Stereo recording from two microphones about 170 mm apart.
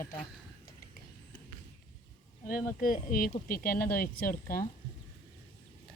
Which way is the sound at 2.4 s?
55° left (ahead or behind).